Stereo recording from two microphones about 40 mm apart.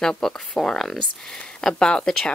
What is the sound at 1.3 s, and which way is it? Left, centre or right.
Speech, left.